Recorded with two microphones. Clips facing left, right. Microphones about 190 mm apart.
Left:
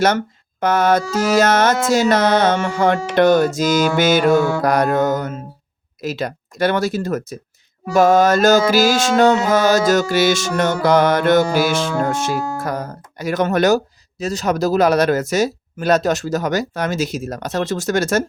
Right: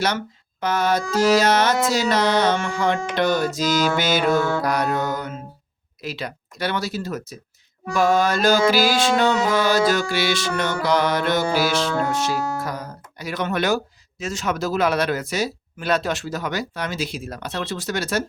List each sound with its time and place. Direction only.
0.6 s speech: 50° left (ahead or behind)